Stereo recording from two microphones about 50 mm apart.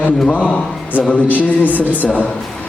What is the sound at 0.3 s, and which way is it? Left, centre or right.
A man's voice, left.